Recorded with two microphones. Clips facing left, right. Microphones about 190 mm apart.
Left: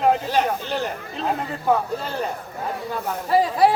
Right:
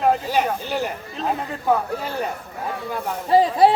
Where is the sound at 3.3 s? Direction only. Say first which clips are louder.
Right 2 dB; 25° right (ahead or behind).